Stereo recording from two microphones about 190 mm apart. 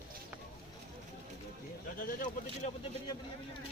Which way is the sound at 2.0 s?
45° left (ahead or behind).